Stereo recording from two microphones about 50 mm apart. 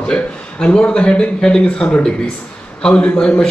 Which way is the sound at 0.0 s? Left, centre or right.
Centre.